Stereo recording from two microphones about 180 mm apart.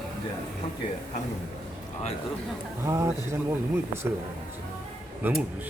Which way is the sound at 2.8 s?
15° right (ahead or behind).